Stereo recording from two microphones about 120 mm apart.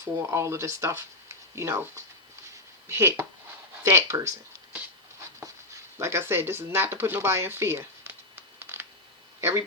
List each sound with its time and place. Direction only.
0.0 s speech: 25° right (ahead or behind)
6.0 s speech: 20° right (ahead or behind)
9.4 s a sound: 25° right (ahead or behind)